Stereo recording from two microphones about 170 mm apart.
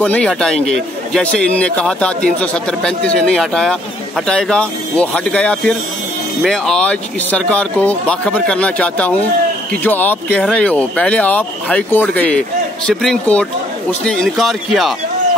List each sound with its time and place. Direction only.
0.0 s speech: 5° left (ahead or behind)